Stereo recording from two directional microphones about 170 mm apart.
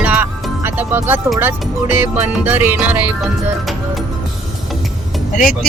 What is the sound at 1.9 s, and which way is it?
Music, 15° right (ahead or behind).